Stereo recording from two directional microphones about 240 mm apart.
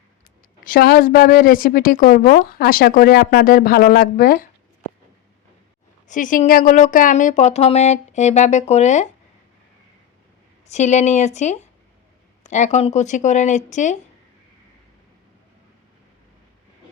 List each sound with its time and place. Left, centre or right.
0.6 s a woman's voice: left
6.1 s speech: left
10.7 s speech: left